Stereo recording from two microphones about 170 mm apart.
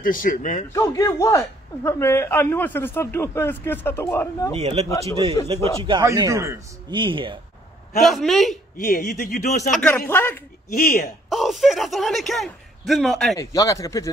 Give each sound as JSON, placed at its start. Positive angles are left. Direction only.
{"t": 0.0, "sound": "a man's voice", "side_deg": 55}
{"t": 0.7, "sound": "a man's voice", "side_deg": 20}
{"t": 4.6, "sound": "a man's voice", "side_deg": -40}
{"t": 5.9, "sound": "a man's voice", "side_deg": -20}
{"t": 6.9, "sound": "speech", "side_deg": -30}
{"t": 8.0, "sound": "speech", "side_deg": 0}
{"t": 8.7, "sound": "speech", "side_deg": 60}
{"t": 9.7, "sound": "a man's voice", "side_deg": 5}
{"t": 10.7, "sound": "speech", "side_deg": 60}
{"t": 11.2, "sound": "speech", "side_deg": 0}
{"t": 13.4, "sound": "speech", "side_deg": 20}